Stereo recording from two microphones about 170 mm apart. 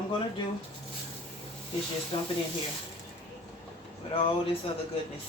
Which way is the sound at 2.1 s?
35° left (ahead or behind).